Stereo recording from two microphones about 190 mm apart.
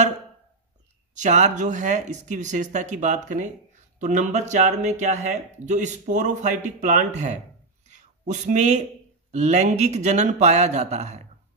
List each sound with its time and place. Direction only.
1.1 s speech: 40° right (ahead or behind)
7.9 s a sound: 40° right (ahead or behind)
9.3 s speech: 35° right (ahead or behind)